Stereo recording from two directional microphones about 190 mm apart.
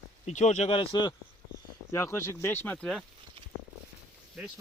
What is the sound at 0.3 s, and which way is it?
Speech, 35° left (ahead or behind).